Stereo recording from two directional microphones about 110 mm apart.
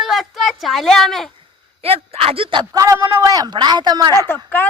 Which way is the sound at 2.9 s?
20° right (ahead or behind).